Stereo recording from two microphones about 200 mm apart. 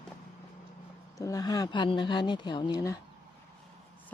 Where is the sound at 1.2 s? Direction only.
15° left (ahead or behind).